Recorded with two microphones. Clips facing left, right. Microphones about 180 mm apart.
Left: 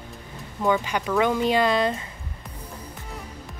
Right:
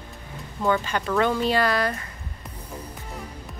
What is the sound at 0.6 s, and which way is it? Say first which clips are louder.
Speech: left 1 dB; 15° left (ahead or behind).